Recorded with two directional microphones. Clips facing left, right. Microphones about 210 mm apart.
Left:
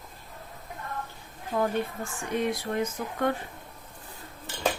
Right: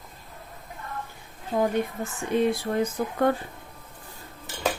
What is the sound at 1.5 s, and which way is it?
Speech, 15° right (ahead or behind).